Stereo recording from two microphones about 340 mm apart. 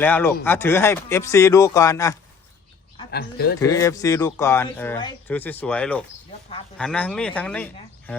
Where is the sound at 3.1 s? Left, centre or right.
Left.